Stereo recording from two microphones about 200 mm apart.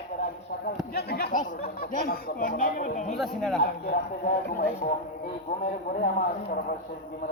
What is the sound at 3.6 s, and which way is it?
Speech, 45° left (ahead or behind).